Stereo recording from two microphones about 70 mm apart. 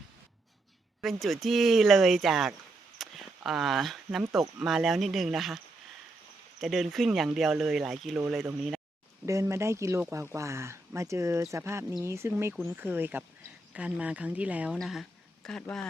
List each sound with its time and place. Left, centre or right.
1.0 s speech: centre
3.0 s a sound: centre
4.4 s speech: centre
6.6 s speech: centre
9.2 s speech: right; by 14.8 s centre
14.8 s speech: centre